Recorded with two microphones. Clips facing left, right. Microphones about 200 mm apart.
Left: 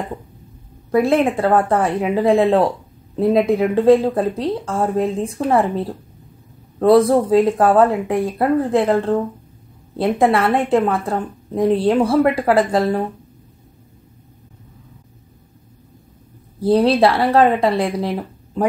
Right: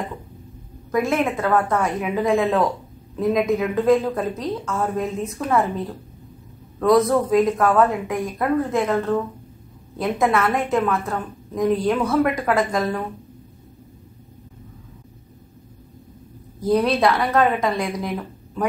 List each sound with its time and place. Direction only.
0.9 s a woman's voice: 30° left (ahead or behind)
16.5 s a woman's voice: 30° left (ahead or behind)